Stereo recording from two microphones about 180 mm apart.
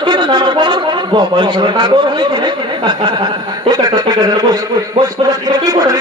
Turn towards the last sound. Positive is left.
turn(degrees=-20)  # may be behind; listen again after turning